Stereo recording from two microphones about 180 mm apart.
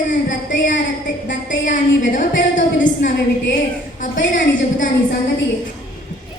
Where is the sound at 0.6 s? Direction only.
45° left (ahead or behind).